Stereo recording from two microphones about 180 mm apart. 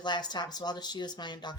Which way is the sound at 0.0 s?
25° left (ahead or behind).